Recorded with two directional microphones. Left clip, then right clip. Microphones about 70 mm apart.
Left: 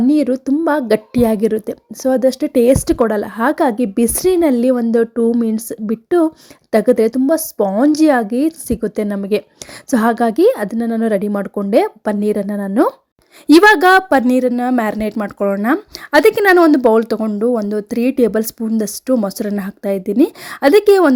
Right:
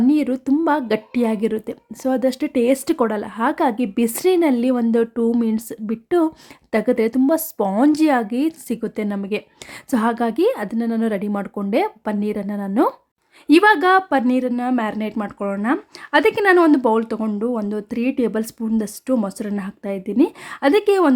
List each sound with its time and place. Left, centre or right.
0.1 s a sound: left
0.6 s a woman's voice: left
1.5 s a woman's voice: left
3.2 s a woman's voice: left
4.9 s a woman's voice: left
7.3 s speech: centre
7.9 s a woman's voice: left
11.7 s speech: left
13.5 s speech: left
17.2 s speech: centre
17.6 s a woman's voice: left
19.5 s speech: left